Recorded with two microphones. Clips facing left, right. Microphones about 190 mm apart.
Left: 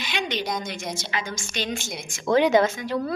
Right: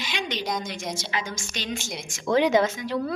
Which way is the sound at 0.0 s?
60° left (ahead or behind).